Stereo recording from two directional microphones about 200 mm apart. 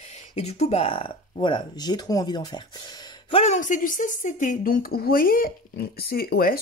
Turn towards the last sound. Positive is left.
turn(degrees=45)  # may be behind; listen again after turning